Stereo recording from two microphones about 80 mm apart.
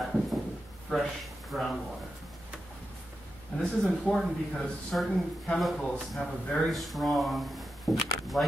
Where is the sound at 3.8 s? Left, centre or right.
Centre.